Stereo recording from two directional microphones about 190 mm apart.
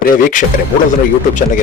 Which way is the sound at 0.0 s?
45° left (ahead or behind).